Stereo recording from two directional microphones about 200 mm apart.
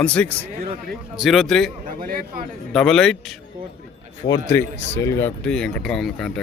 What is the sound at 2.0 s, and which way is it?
Speech, 45° right (ahead or behind).